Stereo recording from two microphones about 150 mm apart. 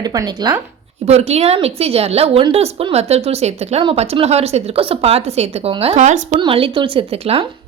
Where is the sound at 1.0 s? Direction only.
45° right (ahead or behind).